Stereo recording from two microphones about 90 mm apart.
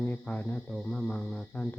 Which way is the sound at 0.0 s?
20° left (ahead or behind).